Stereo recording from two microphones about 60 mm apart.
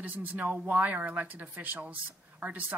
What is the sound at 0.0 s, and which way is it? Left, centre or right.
A woman's voice, right.